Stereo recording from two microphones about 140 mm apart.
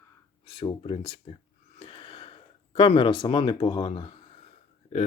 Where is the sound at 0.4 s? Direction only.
35° left (ahead or behind).